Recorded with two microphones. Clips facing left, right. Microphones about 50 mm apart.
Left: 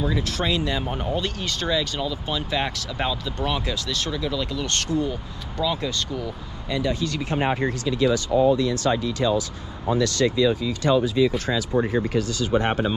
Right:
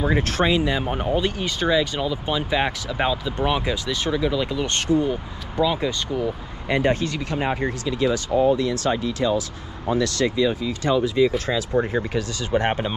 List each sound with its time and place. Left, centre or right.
0.1 s speech: right
0.5 s speech: centre
6.7 s speech: right
7.3 s speech: left
8.4 s speech: right
10.2 s speech: right
10.7 s speech: right
11.1 s speech: right